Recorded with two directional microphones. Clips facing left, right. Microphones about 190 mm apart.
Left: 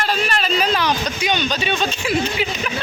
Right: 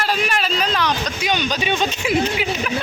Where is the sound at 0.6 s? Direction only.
5° left (ahead or behind).